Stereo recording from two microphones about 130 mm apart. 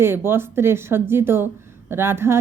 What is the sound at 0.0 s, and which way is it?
A woman's voice, 15° right (ahead or behind).